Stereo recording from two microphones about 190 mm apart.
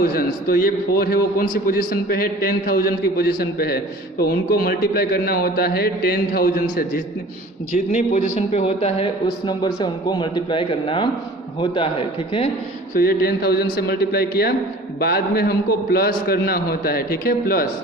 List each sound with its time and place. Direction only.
0.0 s a man's voice: 50° left (ahead or behind)
7.7 s speech: 40° left (ahead or behind)
9.5 s a man's voice: 20° left (ahead or behind)
12.9 s a man's voice: 50° left (ahead or behind)